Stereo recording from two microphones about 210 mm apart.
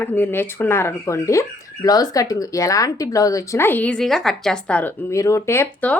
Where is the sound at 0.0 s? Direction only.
10° left (ahead or behind).